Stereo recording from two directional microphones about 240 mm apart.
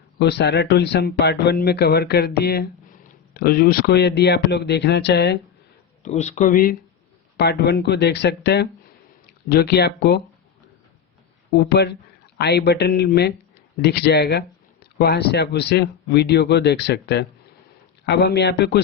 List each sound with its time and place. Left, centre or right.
0.2 s speech: left
6.0 s speech: left
11.5 s speech: left